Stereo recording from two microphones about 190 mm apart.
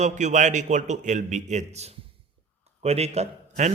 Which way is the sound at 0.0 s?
40° right (ahead or behind).